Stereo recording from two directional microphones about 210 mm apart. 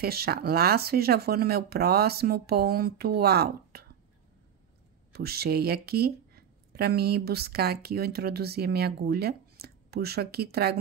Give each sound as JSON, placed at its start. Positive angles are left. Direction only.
{"t": 0.0, "sound": "speech", "side_deg": -45}
{"t": 5.1, "sound": "speech", "side_deg": -50}